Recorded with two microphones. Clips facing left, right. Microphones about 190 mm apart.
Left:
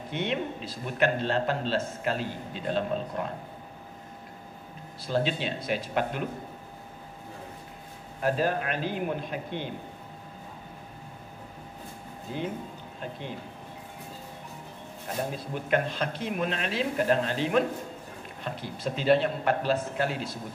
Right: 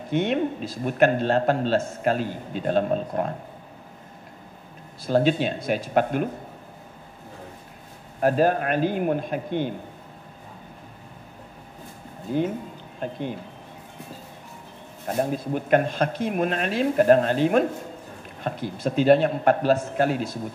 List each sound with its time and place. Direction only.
0.1 s a man's voice: 45° right (ahead or behind)
5.0 s a man's voice: 50° right (ahead or behind)
8.2 s a man's voice: 50° right (ahead or behind)
15.1 s a man's voice: 50° right (ahead or behind)